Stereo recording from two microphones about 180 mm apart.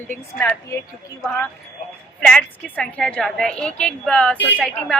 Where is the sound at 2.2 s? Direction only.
5° left (ahead or behind).